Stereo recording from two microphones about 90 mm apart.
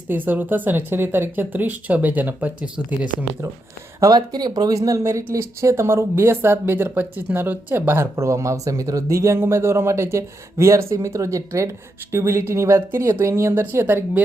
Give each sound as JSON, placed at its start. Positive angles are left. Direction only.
{"t": 0.1, "sound": "speech", "side_deg": -20}
{"t": 4.0, "sound": "speech", "side_deg": -45}